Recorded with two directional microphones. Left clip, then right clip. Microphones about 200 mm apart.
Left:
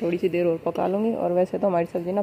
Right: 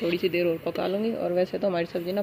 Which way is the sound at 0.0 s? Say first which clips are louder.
Left 2 dB; 10° left (ahead or behind).